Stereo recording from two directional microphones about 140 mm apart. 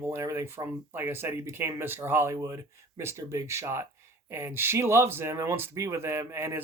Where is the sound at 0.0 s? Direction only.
15° right (ahead or behind).